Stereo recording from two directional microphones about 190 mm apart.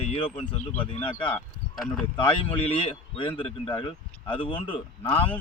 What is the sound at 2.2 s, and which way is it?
Speech, 25° left (ahead or behind).